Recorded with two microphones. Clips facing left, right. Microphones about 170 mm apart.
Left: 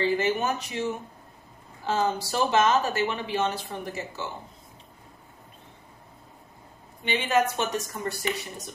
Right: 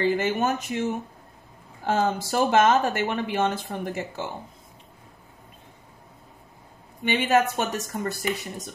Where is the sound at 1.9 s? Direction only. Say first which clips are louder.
Right 2 dB; 50° right (ahead or behind).